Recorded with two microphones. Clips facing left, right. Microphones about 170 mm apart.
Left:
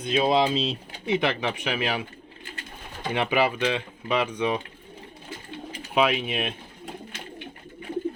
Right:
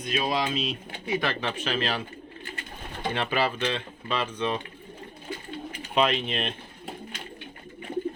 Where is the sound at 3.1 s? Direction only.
15° left (ahead or behind).